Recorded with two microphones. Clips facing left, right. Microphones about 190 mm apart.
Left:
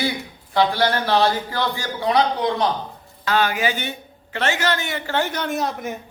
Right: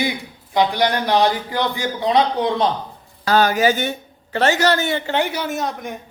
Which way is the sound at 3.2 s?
40° right (ahead or behind).